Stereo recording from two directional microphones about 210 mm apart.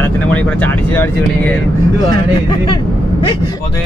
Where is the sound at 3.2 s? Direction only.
20° left (ahead or behind).